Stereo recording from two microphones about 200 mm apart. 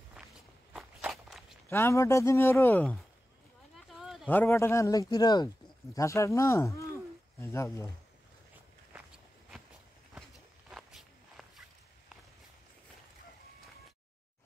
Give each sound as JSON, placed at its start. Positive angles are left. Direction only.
{"t": 0.7, "sound": "walk", "side_deg": 0}
{"t": 1.7, "sound": "a man's voice", "side_deg": 15}
{"t": 3.7, "sound": "a sound", "side_deg": 0}
{"t": 4.3, "sound": "a man's voice", "side_deg": 10}
{"t": 10.7, "sound": "walk", "side_deg": 0}